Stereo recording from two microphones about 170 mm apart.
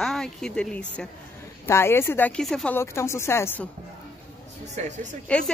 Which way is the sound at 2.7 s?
15° left (ahead or behind).